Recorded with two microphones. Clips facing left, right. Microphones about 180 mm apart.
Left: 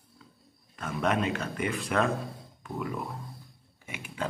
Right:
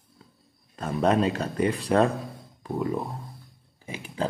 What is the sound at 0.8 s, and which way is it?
A man's voice, 35° right (ahead or behind).